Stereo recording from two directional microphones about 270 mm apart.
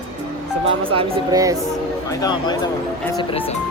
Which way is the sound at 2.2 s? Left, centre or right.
Centre.